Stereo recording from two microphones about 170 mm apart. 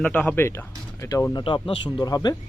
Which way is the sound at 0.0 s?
10° left (ahead or behind).